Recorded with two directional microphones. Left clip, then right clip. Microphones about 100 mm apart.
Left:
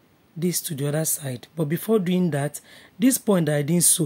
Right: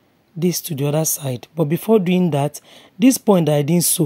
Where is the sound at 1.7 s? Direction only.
60° right (ahead or behind).